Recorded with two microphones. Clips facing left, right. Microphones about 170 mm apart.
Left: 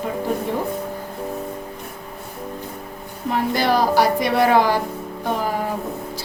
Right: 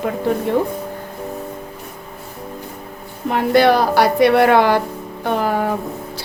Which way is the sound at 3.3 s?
65° right (ahead or behind).